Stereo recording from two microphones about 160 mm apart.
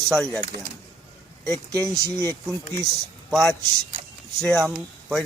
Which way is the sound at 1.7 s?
20° right (ahead or behind).